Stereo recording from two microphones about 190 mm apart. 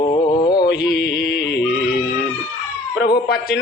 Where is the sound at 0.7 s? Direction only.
20° left (ahead or behind).